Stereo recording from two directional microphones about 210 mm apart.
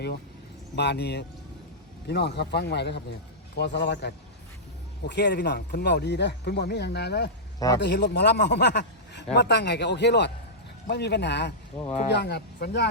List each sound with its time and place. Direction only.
0.8 s speech: 55° left (ahead or behind)
11.8 s speech: 25° left (ahead or behind)
12.1 s speech: 50° left (ahead or behind)